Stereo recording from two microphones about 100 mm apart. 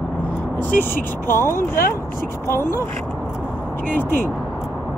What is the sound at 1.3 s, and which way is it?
Speech, 25° left (ahead or behind).